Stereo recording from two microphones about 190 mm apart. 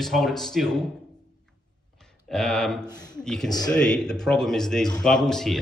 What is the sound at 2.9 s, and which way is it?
Speech, 20° left (ahead or behind).